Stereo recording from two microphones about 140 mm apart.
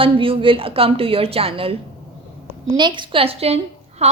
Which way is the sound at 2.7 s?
35° right (ahead or behind).